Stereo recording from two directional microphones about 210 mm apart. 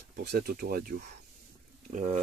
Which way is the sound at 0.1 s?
45° right (ahead or behind).